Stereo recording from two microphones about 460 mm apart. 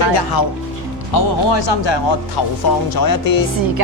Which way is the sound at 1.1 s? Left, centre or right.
Left.